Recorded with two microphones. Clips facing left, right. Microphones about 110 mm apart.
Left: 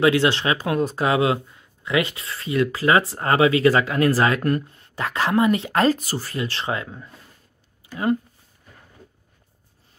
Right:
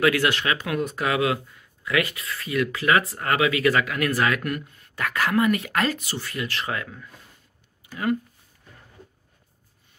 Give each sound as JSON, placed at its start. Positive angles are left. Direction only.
{"t": 0.0, "sound": "speech", "side_deg": 25}